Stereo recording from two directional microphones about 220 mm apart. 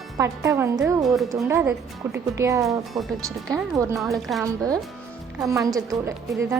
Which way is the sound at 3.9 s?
Centre (ahead or behind).